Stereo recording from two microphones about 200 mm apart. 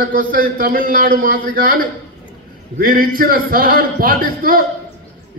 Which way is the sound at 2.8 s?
45° right (ahead or behind).